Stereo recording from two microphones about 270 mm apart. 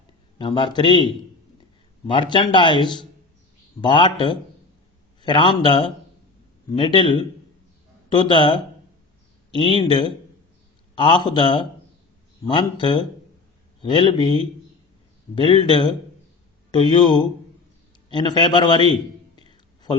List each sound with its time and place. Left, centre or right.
0.3 s a man's voice: centre
2.0 s a man's voice: centre